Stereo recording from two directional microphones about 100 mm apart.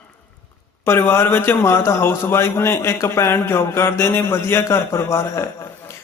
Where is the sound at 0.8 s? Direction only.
25° left (ahead or behind).